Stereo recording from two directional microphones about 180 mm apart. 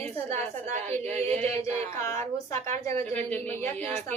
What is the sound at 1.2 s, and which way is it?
Speech, 35° right (ahead or behind).